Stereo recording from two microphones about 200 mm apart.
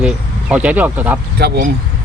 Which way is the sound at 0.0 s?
5° right (ahead or behind).